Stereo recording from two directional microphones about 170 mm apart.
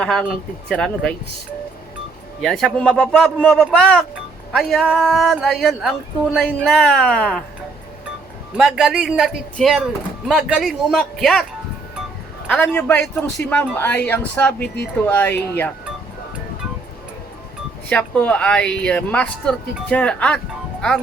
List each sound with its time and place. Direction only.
0.0 s speech: 5° left (ahead or behind)
2.4 s speech: centre (ahead or behind)
8.5 s speech: 5° right (ahead or behind)
12.5 s speech: 10° left (ahead or behind)
17.8 s speech: 5° left (ahead or behind)